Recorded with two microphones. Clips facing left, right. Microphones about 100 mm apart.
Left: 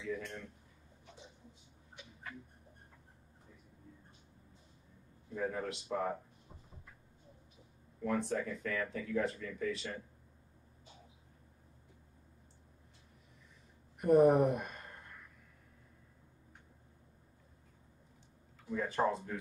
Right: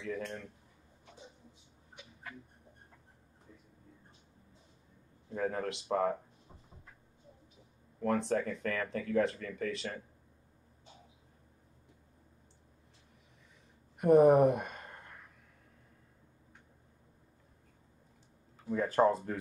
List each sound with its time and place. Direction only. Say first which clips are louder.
0.0 s a sound: right 2 dB; 60° right (ahead or behind)
5.3 s a man's voice: right 3 dB; 60° right (ahead or behind)
8.3 s speech: right 4 dB; 60° right (ahead or behind)
13.9 s speech: right 3 dB; 65° right (ahead or behind)
18.7 s speech: right 6 dB; 45° right (ahead or behind)